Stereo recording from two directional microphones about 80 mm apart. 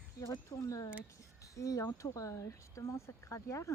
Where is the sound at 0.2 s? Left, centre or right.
Left.